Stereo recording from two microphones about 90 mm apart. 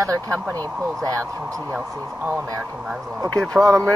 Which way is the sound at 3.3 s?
5° left (ahead or behind).